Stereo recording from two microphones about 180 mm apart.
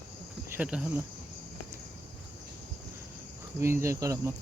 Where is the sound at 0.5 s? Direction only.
5° right (ahead or behind).